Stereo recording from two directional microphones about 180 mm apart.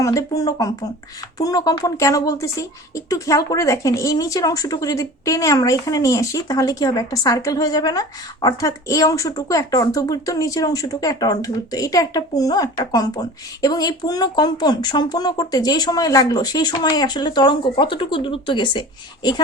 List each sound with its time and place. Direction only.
0.0 s speech: 20° left (ahead or behind)